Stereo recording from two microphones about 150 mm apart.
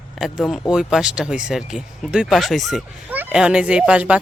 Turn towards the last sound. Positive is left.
turn(degrees=-10)  # may be behind; listen again after turning